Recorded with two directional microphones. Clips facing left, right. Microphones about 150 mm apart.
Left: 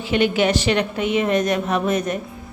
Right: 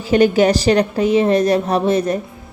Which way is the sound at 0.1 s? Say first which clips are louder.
Right 6 dB; 40° right (ahead or behind).